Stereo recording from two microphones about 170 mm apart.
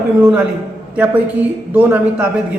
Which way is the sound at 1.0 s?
10° right (ahead or behind).